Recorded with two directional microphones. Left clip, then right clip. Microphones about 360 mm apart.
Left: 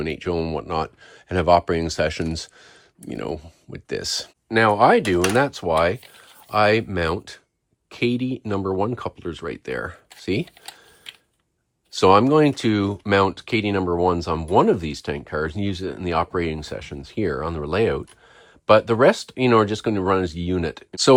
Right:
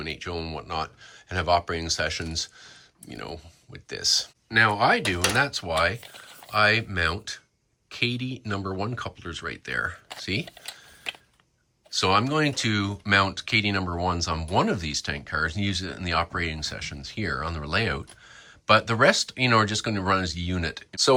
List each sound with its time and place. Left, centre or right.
0.0 s speech: centre
11.9 s speech: centre